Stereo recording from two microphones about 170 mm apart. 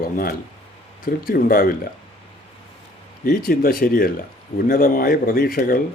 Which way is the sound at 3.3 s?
60° left (ahead or behind).